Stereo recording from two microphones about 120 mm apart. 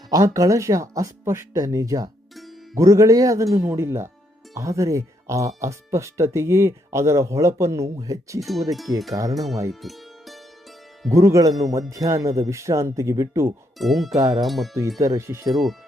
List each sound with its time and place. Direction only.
0.1 s speech: 25° right (ahead or behind)
8.4 s speech: centre (ahead or behind)
8.9 s speech: 25° right (ahead or behind)
9.3 s speech: centre (ahead or behind)
9.8 s music: centre (ahead or behind)
11.1 s speech: 25° right (ahead or behind)
13.7 s speech: centre (ahead or behind)
14.2 s speech: 30° right (ahead or behind)
14.4 s speech: centre (ahead or behind)
14.9 s speech: 25° right (ahead or behind)
15.4 s speech: centre (ahead or behind)